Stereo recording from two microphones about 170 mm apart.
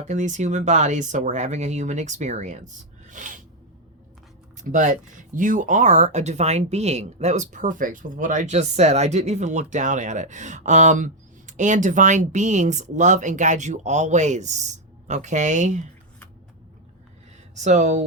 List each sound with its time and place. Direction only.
0.0 s speech: 45° right (ahead or behind)
4.5 s speech: 45° right (ahead or behind)
17.6 s speech: 45° right (ahead or behind)